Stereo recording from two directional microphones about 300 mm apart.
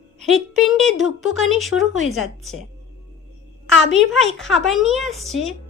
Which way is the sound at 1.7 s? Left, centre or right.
Left.